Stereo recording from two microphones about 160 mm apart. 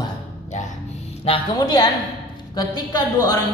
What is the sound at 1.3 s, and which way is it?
Speech, 35° left (ahead or behind).